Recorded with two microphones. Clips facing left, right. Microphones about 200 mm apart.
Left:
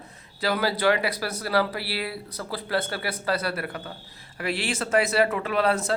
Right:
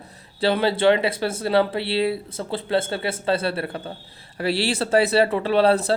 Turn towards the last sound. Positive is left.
turn(degrees=-30)  # may be behind; listen again after turning